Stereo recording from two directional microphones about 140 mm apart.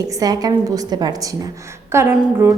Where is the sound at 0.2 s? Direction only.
25° right (ahead or behind).